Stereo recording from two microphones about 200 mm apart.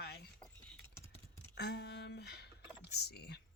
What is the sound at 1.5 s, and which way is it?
Speech, 55° left (ahead or behind).